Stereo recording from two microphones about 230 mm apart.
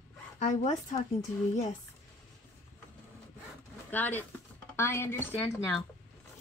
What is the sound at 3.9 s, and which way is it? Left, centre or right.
A woman's voice, centre.